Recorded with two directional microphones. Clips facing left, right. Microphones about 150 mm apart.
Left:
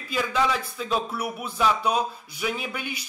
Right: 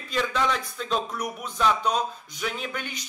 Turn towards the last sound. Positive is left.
turn(degrees=10)  # may be behind; listen again after turning